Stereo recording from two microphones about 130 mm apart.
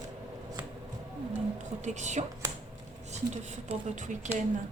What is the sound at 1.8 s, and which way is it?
A woman's voice, 65° right (ahead or behind).